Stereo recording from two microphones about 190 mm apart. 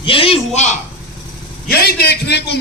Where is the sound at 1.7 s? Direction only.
55° left (ahead or behind).